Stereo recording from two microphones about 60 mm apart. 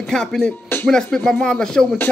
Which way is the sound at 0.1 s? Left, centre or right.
Centre.